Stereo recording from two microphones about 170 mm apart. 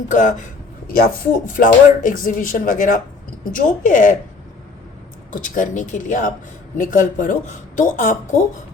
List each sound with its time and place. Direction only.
0.1 s speech: 50° left (ahead or behind)
0.9 s speech: 60° left (ahead or behind)
5.3 s speech: 50° left (ahead or behind)